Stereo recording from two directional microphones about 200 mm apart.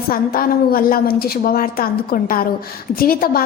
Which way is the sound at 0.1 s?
45° left (ahead or behind).